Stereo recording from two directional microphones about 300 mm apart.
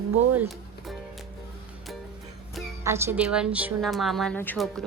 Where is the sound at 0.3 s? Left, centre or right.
Centre.